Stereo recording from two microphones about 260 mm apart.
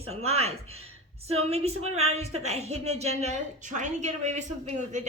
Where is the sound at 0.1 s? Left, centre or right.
Right.